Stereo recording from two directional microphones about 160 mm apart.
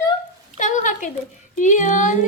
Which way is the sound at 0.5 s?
50° left (ahead or behind).